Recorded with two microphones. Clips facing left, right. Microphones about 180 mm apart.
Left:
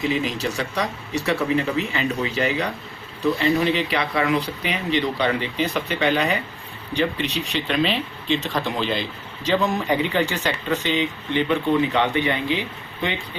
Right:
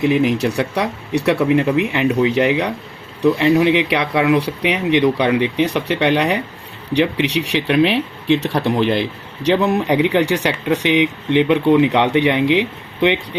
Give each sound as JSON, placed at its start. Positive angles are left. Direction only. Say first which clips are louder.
{"t": 0.0, "sound": "speech", "louder": "right 8 dB", "side_deg": -65}